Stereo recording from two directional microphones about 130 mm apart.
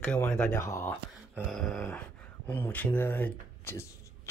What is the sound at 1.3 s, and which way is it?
Dog, centre (ahead or behind).